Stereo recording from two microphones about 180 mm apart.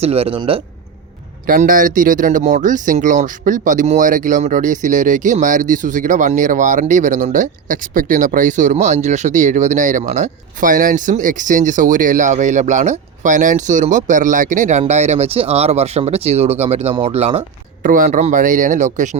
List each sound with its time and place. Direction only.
0.0 s speech: 35° right (ahead or behind)
1.5 s speech: 50° right (ahead or behind)
17.8 s speech: 45° right (ahead or behind)